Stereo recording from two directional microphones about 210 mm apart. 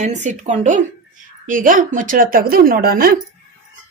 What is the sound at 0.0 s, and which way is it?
A woman's voice, 35° right (ahead or behind).